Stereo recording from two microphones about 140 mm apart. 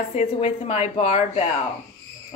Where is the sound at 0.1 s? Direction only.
50° left (ahead or behind).